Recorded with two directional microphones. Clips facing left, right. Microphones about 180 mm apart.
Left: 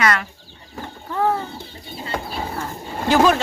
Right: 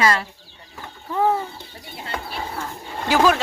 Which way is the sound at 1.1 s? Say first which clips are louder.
Right 1 dB; 10° right (ahead or behind).